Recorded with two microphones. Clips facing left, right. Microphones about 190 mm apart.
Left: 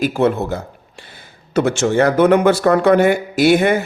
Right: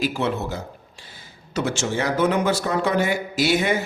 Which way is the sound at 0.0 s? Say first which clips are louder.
Left 7 dB; 50° left (ahead or behind).